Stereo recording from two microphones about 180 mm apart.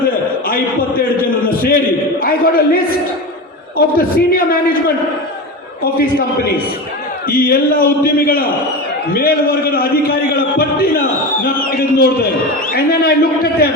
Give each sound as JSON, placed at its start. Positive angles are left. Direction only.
{"t": 0.4, "sound": "a sound", "side_deg": 55}
{"t": 2.2, "sound": "a man's voice", "side_deg": 55}
{"t": 7.3, "sound": "a man's voice", "side_deg": 55}